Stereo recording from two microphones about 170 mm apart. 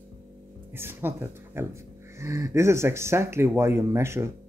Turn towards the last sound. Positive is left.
turn(degrees=-15)  # may be behind; listen again after turning